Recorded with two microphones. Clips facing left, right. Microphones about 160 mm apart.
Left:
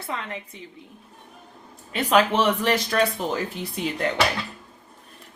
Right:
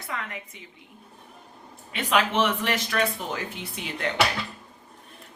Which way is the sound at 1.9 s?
35° left (ahead or behind).